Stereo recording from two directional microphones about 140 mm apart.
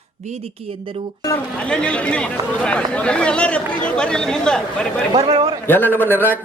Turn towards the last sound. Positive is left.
turn(degrees=15)  # may be behind; listen again after turning